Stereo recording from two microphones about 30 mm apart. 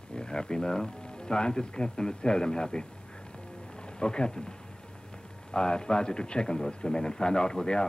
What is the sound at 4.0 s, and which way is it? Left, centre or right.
Speech, left.